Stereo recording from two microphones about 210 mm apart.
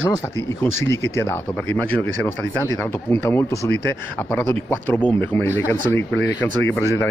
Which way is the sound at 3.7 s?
55° left (ahead or behind).